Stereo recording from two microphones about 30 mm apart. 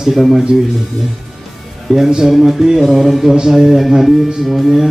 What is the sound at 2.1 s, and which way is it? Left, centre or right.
Speech, right.